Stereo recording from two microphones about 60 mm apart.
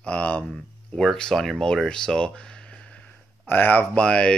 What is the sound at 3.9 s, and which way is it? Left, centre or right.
Speech, centre.